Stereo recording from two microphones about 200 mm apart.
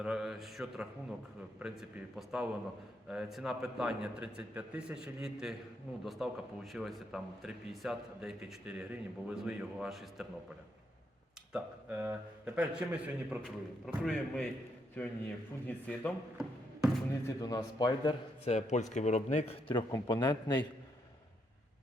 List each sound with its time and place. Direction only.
0.0 s speech: 5° right (ahead or behind)
11.5 s speech: 5° right (ahead or behind)
17.2 s a man's voice: 15° left (ahead or behind)